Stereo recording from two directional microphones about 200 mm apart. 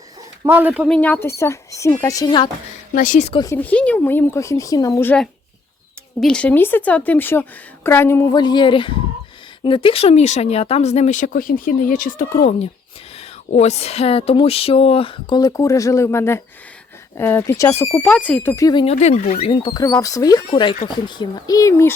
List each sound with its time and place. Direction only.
0.4 s speech: 10° right (ahead or behind)
0.9 s speech: 5° left (ahead or behind); by 2.5 s 20° left (ahead or behind)
2.9 s speech: 40° left (ahead or behind)
3.4 s speech: 10° left (ahead or behind)